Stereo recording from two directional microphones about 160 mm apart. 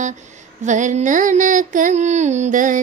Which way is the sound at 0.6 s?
50° right (ahead or behind).